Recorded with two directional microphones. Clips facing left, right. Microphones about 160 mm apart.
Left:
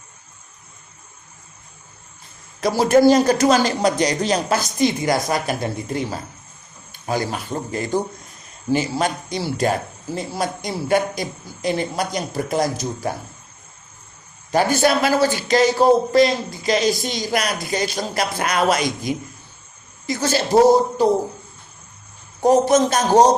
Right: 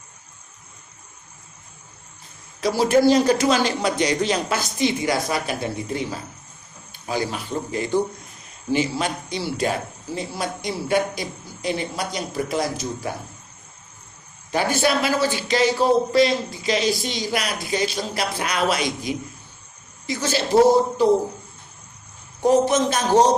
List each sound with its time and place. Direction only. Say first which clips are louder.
2.6 s a man's voice: left 3 dB; 50° left (ahead or behind)
7.1 s a man's voice: left 2 dB; 45° left (ahead or behind)
14.5 s a man's voice: left 4 dB; 45° left (ahead or behind)
22.4 s a man's voice: left 3 dB; 40° left (ahead or behind)